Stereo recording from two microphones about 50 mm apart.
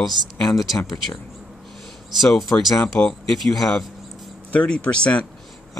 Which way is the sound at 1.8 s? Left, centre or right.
Centre.